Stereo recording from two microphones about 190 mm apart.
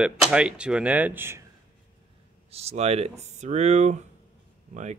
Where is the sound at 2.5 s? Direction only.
35° right (ahead or behind).